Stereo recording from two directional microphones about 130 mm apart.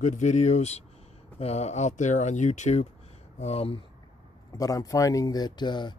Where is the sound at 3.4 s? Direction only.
50° left (ahead or behind).